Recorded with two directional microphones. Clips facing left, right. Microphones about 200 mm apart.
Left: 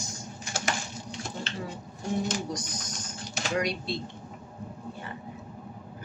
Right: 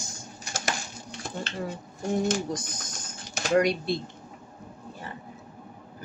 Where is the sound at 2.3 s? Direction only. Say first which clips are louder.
Right 4 dB; 55° right (ahead or behind).